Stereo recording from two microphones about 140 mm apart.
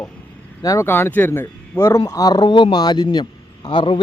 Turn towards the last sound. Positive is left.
turn(degrees=35)  # may be behind; listen again after turning